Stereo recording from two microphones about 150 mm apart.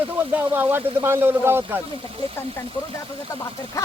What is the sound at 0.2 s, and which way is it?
Speech, 15° right (ahead or behind).